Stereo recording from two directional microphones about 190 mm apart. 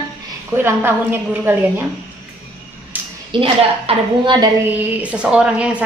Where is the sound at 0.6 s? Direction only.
10° right (ahead or behind).